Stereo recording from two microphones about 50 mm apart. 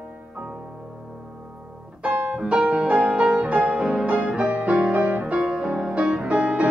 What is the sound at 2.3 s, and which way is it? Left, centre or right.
Music, right.